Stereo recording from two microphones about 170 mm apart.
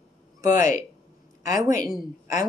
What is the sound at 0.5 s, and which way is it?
A woman's voice, 50° left (ahead or behind).